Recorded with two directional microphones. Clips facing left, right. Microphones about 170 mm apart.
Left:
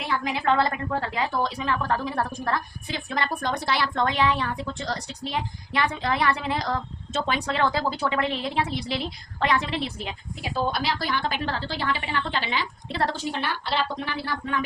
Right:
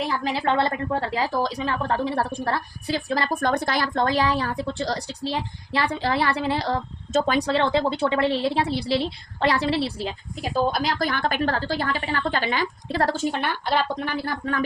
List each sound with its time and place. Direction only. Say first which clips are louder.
0.1 s a woman's voice: right 1 dB; 35° right (ahead or behind)
3.5 s a woman's voice: right 3 dB; 50° right (ahead or behind); by 6.7 s 30° right (ahead or behind)
7.1 s a woman's voice: right 6 dB; 40° right (ahead or behind)
10.7 s a woman's voice: right 3 dB; 45° right (ahead or behind)